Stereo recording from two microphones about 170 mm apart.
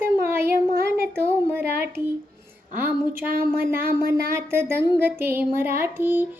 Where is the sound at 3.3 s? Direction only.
60° right (ahead or behind).